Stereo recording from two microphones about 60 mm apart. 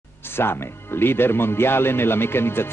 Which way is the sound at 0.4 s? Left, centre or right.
Left.